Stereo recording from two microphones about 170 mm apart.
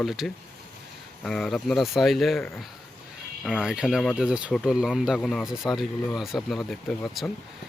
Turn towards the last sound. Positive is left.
turn(degrees=0)  # may be behind; listen again after turning